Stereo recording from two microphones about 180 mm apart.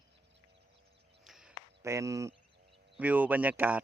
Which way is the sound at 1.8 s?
15° right (ahead or behind).